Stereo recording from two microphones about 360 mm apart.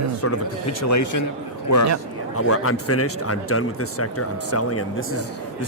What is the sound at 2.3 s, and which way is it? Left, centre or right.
A man's voice, left.